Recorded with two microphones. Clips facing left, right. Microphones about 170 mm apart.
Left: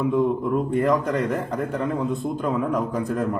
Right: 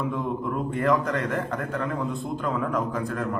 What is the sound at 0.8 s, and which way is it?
Speech, 20° left (ahead or behind).